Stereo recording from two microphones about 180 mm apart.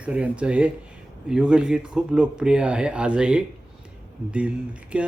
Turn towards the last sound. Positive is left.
turn(degrees=-5)  # may be behind; listen again after turning